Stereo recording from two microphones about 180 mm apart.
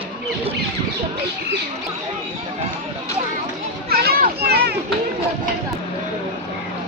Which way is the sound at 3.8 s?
60° right (ahead or behind).